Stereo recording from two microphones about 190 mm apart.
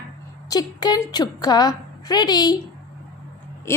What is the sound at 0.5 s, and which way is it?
A woman's voice, 20° left (ahead or behind).